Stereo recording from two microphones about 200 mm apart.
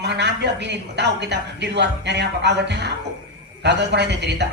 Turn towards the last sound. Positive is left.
turn(degrees=-60)  # may be behind; listen again after turning